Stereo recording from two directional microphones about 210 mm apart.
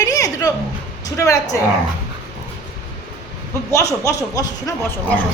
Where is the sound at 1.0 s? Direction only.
15° left (ahead or behind).